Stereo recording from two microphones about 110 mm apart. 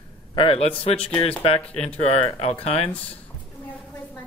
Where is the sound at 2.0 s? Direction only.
70° left (ahead or behind).